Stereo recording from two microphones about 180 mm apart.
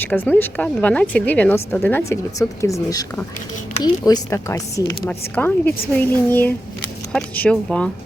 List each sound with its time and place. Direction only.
0.0 s speech: 10° left (ahead or behind)